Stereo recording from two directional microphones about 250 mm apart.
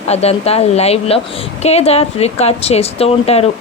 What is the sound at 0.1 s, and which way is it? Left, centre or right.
A woman's voice, left.